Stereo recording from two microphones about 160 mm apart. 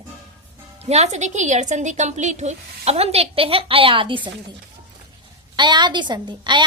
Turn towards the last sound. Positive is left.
turn(degrees=-30)  # may be behind; listen again after turning